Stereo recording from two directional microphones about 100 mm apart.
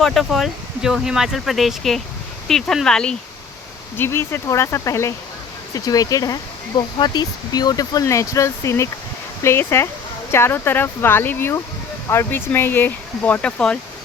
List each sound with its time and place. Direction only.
0.0 s speech: centre (ahead or behind)
3.9 s speech: 25° left (ahead or behind)